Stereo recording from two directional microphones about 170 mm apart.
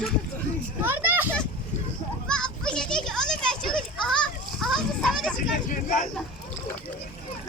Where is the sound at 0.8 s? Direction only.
10° right (ahead or behind).